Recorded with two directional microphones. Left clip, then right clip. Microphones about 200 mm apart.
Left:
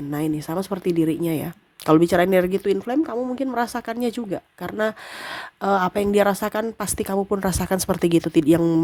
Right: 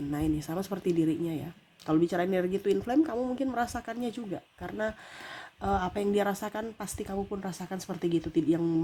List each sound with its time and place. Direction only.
0.1 s a woman's voice: 20° left (ahead or behind); by 8.8 s 35° left (ahead or behind)